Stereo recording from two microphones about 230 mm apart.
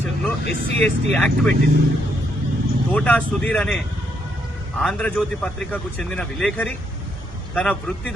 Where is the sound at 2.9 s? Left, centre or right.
Centre.